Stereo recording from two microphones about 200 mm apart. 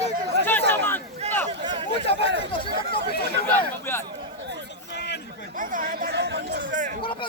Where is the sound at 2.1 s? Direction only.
60° right (ahead or behind).